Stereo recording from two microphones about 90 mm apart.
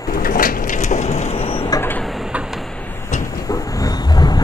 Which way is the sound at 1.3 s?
90° left.